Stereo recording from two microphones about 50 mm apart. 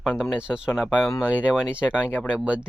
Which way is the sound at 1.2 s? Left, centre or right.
Right.